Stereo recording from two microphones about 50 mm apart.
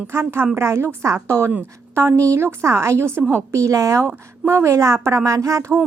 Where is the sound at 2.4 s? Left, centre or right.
Right.